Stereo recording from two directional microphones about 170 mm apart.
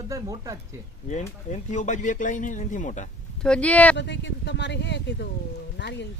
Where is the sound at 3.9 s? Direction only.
90° left.